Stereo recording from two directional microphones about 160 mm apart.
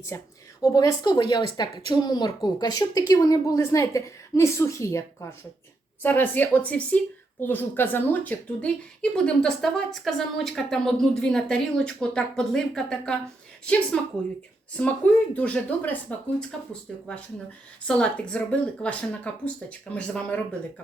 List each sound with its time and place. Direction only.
0.1 s a woman's voice: 20° left (ahead or behind)
17.8 s speech: 5° left (ahead or behind)